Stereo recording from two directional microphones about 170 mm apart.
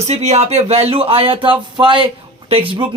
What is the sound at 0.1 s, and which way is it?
Speech, 40° right (ahead or behind).